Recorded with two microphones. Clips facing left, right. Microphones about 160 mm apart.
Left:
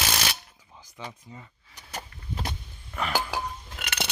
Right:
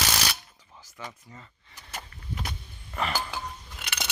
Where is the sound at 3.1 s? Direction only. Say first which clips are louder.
Left 3 dB; 70° left (ahead or behind).